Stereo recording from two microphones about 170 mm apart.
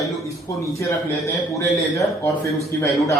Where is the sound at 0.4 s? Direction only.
15° left (ahead or behind).